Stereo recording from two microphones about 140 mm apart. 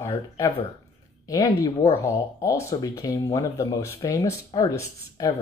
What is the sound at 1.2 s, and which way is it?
Speech, 25° left (ahead or behind).